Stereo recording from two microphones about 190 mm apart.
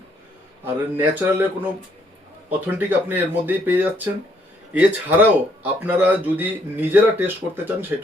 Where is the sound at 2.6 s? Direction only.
10° right (ahead or behind).